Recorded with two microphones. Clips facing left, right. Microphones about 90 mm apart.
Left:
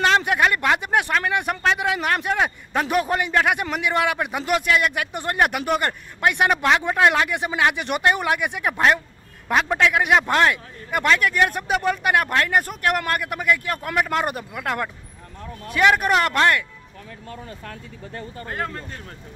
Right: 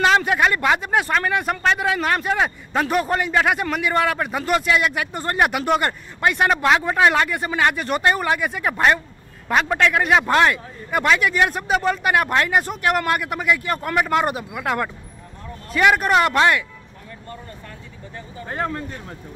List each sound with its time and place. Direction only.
0.0 s a man's voice: centre (ahead or behind)
17.3 s speech: 75° left (ahead or behind)
18.5 s speech: 20° right (ahead or behind)